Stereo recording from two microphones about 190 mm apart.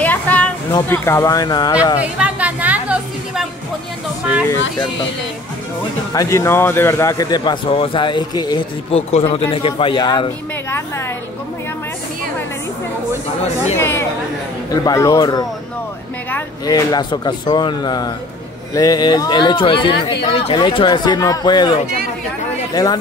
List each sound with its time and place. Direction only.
0.0 s a sound: 10° left (ahead or behind)
0.7 s speech: 15° left (ahead or behind)
2.0 s a woman's voice: 5° right (ahead or behind)
6.1 s a man's voice: 15° left (ahead or behind)
13.7 s a man's voice: 10° left (ahead or behind)